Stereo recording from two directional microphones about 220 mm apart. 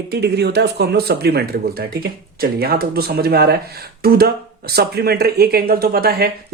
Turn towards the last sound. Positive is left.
turn(degrees=-45)  # may be behind; listen again after turning